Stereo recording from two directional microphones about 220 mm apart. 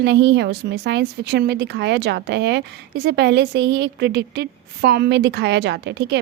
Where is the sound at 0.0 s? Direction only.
50° right (ahead or behind).